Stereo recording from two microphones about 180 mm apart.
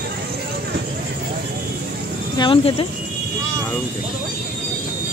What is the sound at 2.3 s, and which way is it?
Speech, 30° left (ahead or behind).